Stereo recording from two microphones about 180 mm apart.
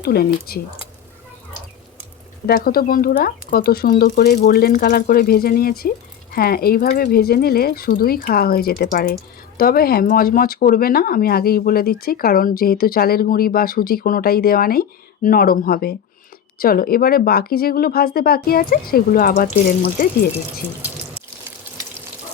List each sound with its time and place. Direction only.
0.0 s speech: 60° left (ahead or behind)
2.5 s speech: 55° left (ahead or behind)